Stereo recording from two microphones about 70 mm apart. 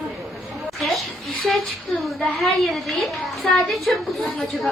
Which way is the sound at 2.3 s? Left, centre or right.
Centre.